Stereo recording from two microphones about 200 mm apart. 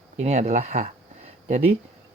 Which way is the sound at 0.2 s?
35° right (ahead or behind).